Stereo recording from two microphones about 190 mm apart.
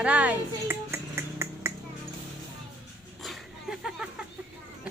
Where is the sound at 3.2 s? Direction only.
Centre (ahead or behind).